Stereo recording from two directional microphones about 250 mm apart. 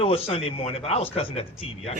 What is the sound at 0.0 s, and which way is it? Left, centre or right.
A child's voice, left.